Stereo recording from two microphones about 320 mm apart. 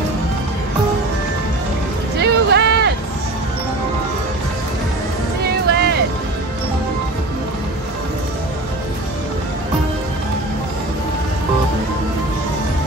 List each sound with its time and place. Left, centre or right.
2.1 s music: right
5.4 s music: right